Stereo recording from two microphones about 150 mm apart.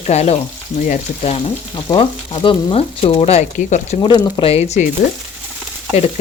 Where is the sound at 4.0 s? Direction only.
30° left (ahead or behind).